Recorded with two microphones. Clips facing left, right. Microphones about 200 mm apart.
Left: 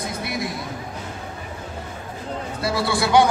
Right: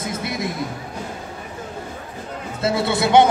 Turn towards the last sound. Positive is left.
turn(degrees=-20)  # may be behind; listen again after turning